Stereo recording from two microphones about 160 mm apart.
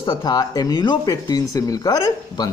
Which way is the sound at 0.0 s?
25° left (ahead or behind).